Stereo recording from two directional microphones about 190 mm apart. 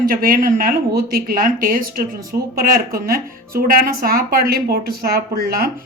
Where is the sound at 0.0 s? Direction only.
50° right (ahead or behind).